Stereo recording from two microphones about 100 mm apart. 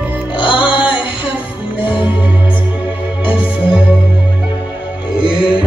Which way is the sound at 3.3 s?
60° left (ahead or behind).